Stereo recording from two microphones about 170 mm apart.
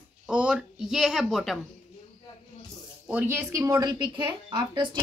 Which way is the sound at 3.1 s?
10° right (ahead or behind).